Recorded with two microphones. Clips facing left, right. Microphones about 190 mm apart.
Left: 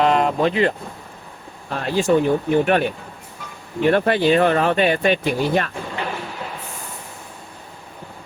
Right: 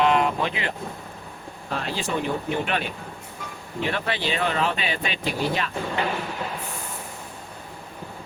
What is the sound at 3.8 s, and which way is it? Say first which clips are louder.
Speech: left 11 dB; 50° left (ahead or behind).